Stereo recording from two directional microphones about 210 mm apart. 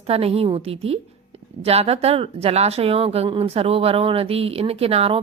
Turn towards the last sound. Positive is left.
turn(degrees=-30)  # may be behind; listen again after turning